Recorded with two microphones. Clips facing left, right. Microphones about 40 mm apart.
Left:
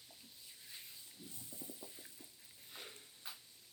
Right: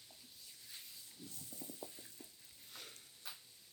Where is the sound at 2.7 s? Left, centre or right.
Centre.